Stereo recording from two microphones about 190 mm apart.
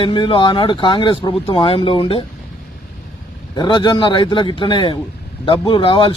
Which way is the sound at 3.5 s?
25° left (ahead or behind).